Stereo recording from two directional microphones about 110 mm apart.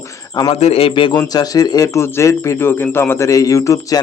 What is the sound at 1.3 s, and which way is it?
Speech, 35° left (ahead or behind).